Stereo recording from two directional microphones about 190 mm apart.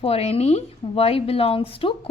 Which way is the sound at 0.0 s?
30° left (ahead or behind).